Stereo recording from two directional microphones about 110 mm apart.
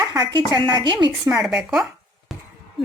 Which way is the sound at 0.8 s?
40° right (ahead or behind).